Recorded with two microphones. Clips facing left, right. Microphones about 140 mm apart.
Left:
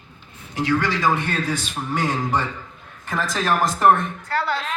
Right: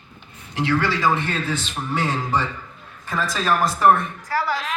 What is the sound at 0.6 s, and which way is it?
A man's voice, 15° left (ahead or behind).